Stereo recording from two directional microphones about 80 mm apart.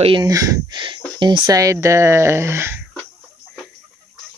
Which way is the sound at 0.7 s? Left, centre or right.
Right.